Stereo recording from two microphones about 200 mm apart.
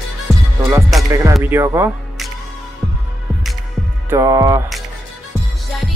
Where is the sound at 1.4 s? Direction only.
15° right (ahead or behind).